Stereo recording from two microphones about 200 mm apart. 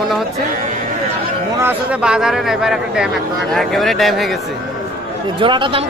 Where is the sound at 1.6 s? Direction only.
10° right (ahead or behind).